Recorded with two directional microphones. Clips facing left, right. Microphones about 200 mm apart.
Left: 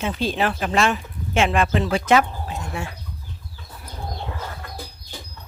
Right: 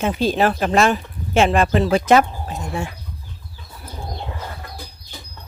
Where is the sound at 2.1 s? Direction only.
40° right (ahead or behind).